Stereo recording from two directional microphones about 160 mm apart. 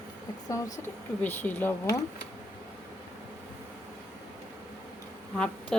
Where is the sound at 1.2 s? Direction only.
10° left (ahead or behind).